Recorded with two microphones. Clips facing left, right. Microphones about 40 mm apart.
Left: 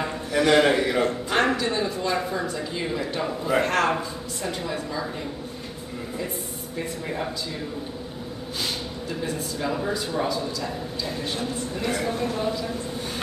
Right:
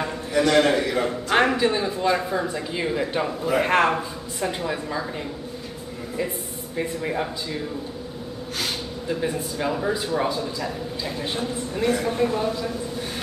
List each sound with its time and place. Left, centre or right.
0.0 s a sound: centre
0.5 s a man's voice: centre
1.0 s speech: centre
9.7 s speech: centre
9.9 s speech: right
11.8 s speech: centre
12.2 s speech: right